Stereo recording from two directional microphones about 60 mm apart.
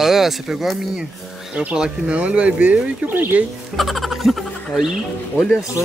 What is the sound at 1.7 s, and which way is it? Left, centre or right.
Speech, centre.